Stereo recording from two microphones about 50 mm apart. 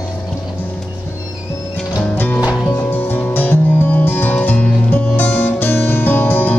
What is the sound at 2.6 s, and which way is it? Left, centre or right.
Music, left.